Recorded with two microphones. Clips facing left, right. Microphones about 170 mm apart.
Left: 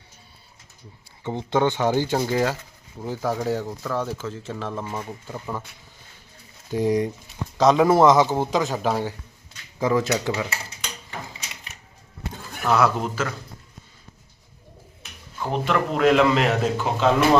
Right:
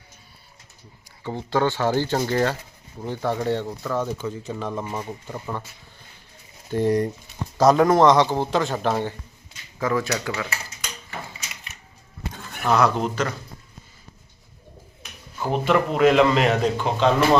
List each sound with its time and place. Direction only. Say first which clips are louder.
1.2 s a man's voice: left 1 dB; 20° left (ahead or behind); by 9.1 s 5° left (ahead or behind)
9.7 s speech: left 2 dB; 15° left (ahead or behind)
12.7 s a man's voice: right 1 dB; 5° left (ahead or behind)
15.4 s a man's voice: right 3 dB; 5° right (ahead or behind)